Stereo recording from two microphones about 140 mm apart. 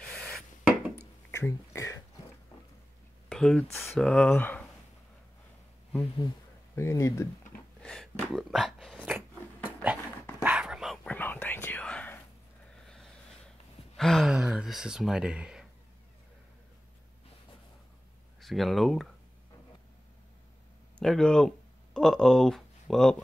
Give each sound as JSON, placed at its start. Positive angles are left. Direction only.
{"t": 0.0, "sound": "rub", "side_deg": 5}
{"t": 0.7, "sound": "a sound", "side_deg": -10}
{"t": 1.3, "sound": "a sound", "side_deg": 20}
{"t": 3.3, "sound": "speech", "side_deg": 5}
{"t": 3.7, "sound": "speech", "side_deg": 15}
{"t": 6.7, "sound": "speech", "side_deg": 20}
{"t": 7.8, "sound": "a sound", "side_deg": 5}
{"t": 9.0, "sound": "a sound", "side_deg": -15}
{"t": 10.4, "sound": "dog", "side_deg": -10}
{"t": 11.1, "sound": "whispering", "side_deg": 15}
{"t": 12.8, "sound": "vehicle", "side_deg": 5}
{"t": 13.9, "sound": "gasp", "side_deg": 5}
{"t": 18.4, "sound": "speech", "side_deg": 0}
{"t": 21.0, "sound": "speech", "side_deg": 5}